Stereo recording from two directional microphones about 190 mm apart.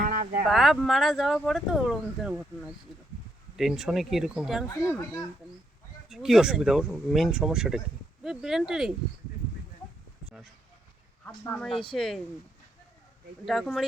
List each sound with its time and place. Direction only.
0.0 s a sound: 45° right (ahead or behind)
0.5 s speech: centre (ahead or behind)
3.6 s speech: centre (ahead or behind)
6.1 s speech: centre (ahead or behind)
10.2 s speech: 5° right (ahead or behind)
13.4 s speech: centre (ahead or behind)